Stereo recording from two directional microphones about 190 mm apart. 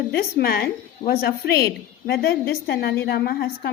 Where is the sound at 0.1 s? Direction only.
55° left (ahead or behind).